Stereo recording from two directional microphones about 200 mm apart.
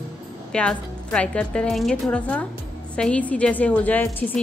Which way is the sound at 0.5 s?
5° left (ahead or behind).